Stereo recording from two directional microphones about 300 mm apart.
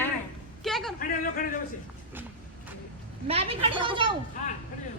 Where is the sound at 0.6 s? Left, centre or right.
Centre.